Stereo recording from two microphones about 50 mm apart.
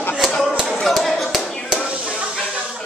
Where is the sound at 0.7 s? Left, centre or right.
Centre.